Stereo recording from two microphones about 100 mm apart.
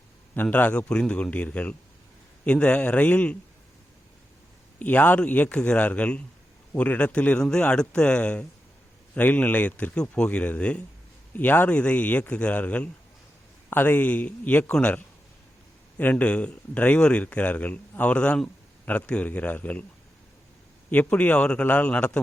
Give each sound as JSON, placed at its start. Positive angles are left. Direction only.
{"t": 0.5, "sound": "a man's voice", "side_deg": 15}
{"t": 4.8, "sound": "a man's voice", "side_deg": 15}
{"t": 20.9, "sound": "a man's voice", "side_deg": 15}